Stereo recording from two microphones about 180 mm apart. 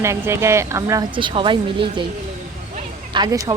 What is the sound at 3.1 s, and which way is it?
Speech, 25° right (ahead or behind).